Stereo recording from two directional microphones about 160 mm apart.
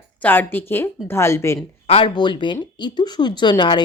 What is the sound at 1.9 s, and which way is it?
A woman's voice, 35° left (ahead or behind).